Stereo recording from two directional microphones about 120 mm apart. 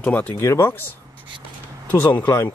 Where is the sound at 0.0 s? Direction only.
10° left (ahead or behind).